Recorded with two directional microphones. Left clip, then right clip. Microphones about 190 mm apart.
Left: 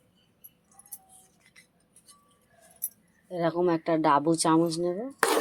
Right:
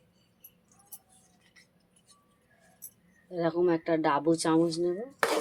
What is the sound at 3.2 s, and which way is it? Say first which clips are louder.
Speech: left 1 dB; 35° left (ahead or behind).